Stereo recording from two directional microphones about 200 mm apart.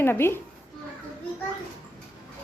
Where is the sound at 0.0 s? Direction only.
10° left (ahead or behind).